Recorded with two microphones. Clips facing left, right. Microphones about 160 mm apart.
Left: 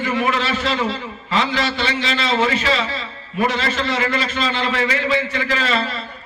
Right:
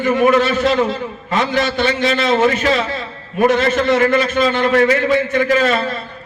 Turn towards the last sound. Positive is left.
turn(degrees=-50)  # may be behind; listen again after turning